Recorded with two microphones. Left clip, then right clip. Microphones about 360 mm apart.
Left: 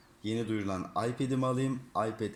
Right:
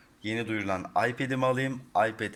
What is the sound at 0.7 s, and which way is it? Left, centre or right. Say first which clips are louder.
Speech: right 6 dB; right.